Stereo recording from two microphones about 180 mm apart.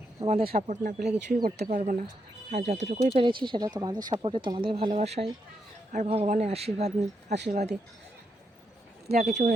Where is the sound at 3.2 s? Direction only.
25° right (ahead or behind).